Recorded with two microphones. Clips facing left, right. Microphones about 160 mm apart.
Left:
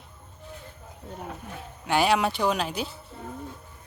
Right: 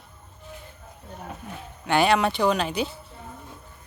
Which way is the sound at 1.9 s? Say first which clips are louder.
Right 2 dB; 5° left (ahead or behind).